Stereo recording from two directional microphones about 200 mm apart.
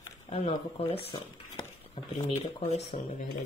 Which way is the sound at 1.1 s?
25° left (ahead or behind).